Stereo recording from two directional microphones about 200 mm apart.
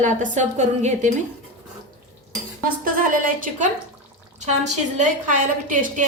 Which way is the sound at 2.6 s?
45° right (ahead or behind).